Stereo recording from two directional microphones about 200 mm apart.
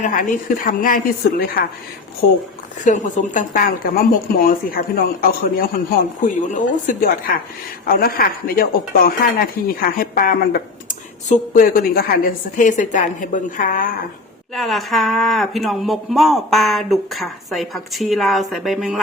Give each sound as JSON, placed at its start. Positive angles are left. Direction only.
{"t": 0.0, "sound": "speech", "side_deg": 40}
{"t": 2.8, "sound": "speech", "side_deg": 40}
{"t": 14.5, "sound": "speech", "side_deg": 0}